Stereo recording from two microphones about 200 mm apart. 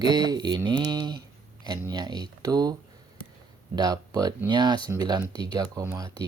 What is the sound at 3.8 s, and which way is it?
Speech, 20° right (ahead or behind).